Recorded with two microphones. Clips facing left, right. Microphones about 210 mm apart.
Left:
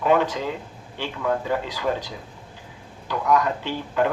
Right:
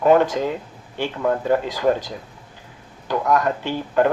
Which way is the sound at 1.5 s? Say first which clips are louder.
Right 6 dB; 45° right (ahead or behind).